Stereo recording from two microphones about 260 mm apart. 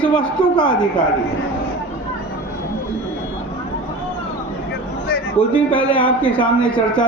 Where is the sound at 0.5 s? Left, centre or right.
Centre.